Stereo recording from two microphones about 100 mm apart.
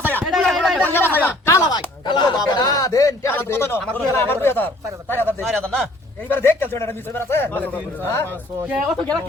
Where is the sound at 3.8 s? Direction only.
5° left (ahead or behind).